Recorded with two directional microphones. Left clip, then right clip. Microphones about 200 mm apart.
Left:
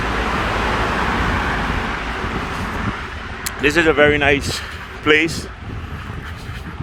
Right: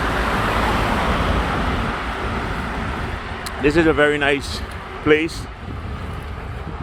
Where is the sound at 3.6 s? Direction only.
25° left (ahead or behind).